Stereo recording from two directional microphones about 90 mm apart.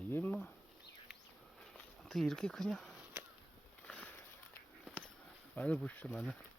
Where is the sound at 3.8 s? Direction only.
15° left (ahead or behind).